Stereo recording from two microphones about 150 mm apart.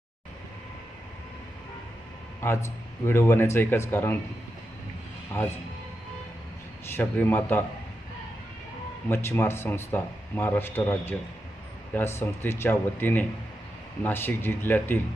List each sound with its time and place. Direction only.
2.4 s speech: 15° left (ahead or behind)
5.4 s speech: 15° left (ahead or behind)
6.9 s speech: 15° left (ahead or behind)
9.0 s speech: 15° left (ahead or behind)